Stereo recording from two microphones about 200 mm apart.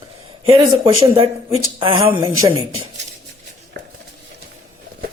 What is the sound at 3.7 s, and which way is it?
Stir, 55° right (ahead or behind).